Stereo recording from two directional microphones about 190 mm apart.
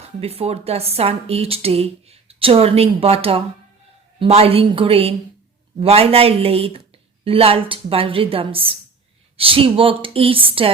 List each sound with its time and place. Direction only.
0.0 s a woman's voice: 30° right (ahead or behind)